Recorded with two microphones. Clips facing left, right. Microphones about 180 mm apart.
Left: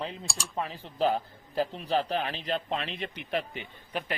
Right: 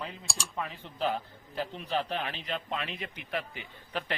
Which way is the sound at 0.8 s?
35° left (ahead or behind).